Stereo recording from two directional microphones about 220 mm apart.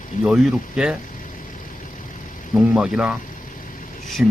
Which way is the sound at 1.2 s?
35° left (ahead or behind).